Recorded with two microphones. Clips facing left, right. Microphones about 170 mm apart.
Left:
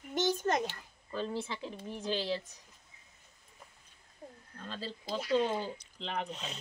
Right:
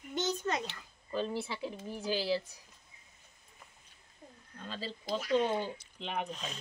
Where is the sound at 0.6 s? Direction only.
50° left (ahead or behind).